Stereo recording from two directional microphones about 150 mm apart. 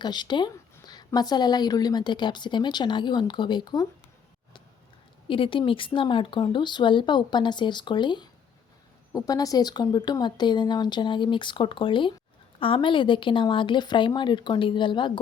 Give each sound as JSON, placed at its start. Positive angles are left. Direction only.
{"t": 0.0, "sound": "a woman's voice", "side_deg": 30}
{"t": 5.3, "sound": "a woman's voice", "side_deg": 35}